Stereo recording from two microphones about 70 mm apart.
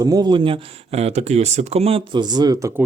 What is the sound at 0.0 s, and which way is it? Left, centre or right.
Speech, right.